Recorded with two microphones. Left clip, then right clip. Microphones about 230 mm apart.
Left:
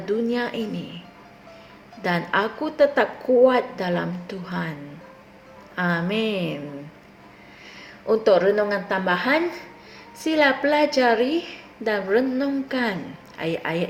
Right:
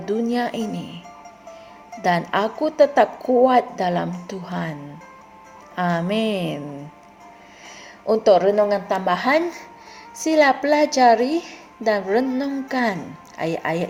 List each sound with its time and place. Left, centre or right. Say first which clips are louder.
0.0 s speech: right 1 dB; right
2.0 s a woman's voice: right 3 dB; right
5.7 s a woman's voice: right 2 dB; right
8.0 s a woman's voice: right 2 dB; right